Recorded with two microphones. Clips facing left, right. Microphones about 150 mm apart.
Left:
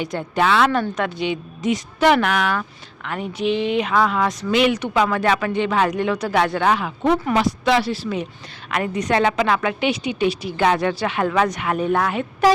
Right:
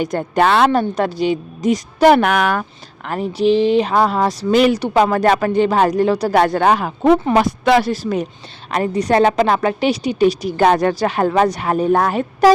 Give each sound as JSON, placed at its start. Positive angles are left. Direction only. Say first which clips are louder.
{"t": 0.0, "sound": "a woman's voice", "louder": "right 5 dB", "side_deg": -45}
{"t": 0.7, "sound": "a woman's voice", "louder": "right 5 dB", "side_deg": -35}
{"t": 7.3, "sound": "a woman's voice", "louder": "right 4 dB", "side_deg": -55}